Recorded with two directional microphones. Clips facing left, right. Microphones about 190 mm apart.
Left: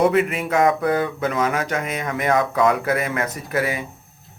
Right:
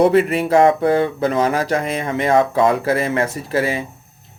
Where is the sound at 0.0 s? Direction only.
35° right (ahead or behind).